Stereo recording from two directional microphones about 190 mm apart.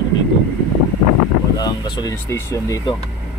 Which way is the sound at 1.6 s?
20° left (ahead or behind).